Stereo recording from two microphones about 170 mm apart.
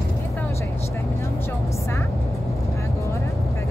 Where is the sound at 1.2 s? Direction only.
15° left (ahead or behind).